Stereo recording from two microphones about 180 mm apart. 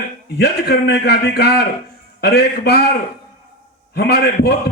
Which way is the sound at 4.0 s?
65° left (ahead or behind).